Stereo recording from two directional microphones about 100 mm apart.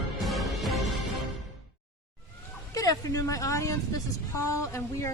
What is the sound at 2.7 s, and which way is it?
Speech, 35° left (ahead or behind).